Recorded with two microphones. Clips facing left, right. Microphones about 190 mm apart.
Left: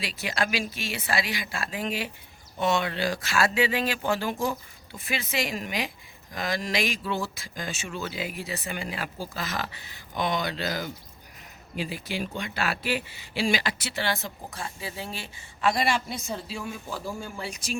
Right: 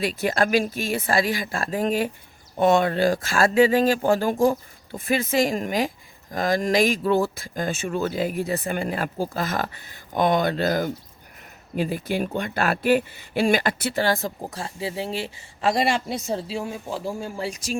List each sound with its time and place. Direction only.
0.0 s speech: 50° right (ahead or behind)